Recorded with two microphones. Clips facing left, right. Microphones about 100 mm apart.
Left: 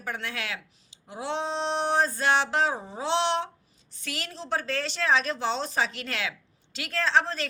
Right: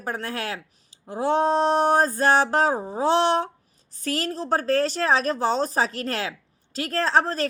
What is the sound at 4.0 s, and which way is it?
A woman's voice, 40° right (ahead or behind).